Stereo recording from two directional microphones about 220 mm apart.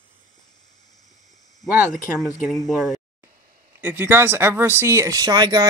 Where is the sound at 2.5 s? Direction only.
Centre (ahead or behind); by 5.6 s 20° right (ahead or behind).